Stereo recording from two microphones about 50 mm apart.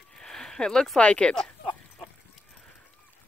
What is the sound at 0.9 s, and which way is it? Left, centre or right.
Speech, centre.